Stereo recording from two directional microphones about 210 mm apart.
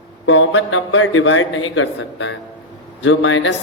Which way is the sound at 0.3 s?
65° left (ahead or behind).